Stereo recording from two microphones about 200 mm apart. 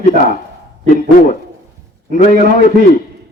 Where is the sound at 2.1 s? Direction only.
40° left (ahead or behind).